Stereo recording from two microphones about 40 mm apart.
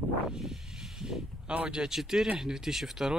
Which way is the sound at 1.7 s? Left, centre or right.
Centre.